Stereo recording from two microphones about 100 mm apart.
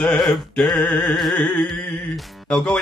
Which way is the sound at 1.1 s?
Centre (ahead or behind).